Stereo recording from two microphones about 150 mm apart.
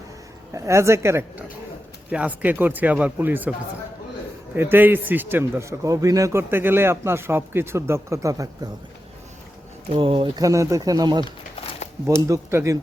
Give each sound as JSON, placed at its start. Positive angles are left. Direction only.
{"t": 0.5, "sound": "speech", "side_deg": -20}
{"t": 4.5, "sound": "speech", "side_deg": -15}
{"t": 9.9, "sound": "speech", "side_deg": -35}
{"t": 10.4, "sound": "speech", "side_deg": -20}
{"t": 12.3, "sound": "speech", "side_deg": -20}